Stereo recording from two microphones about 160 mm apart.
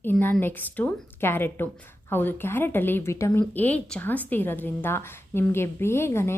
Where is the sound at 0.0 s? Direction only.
10° left (ahead or behind).